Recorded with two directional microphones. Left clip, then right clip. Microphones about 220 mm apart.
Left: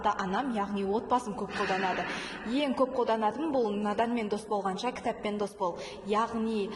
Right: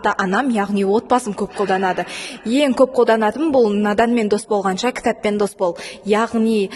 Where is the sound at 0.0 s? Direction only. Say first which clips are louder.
Right 12 dB; 50° right (ahead or behind).